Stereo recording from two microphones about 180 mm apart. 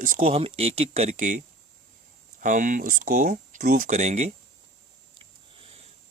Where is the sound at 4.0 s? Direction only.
40° right (ahead or behind).